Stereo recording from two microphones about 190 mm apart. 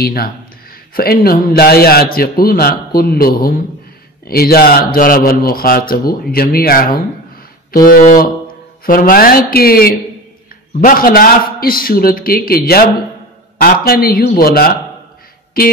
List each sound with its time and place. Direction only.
0.0 s a man's voice: 50° left (ahead or behind)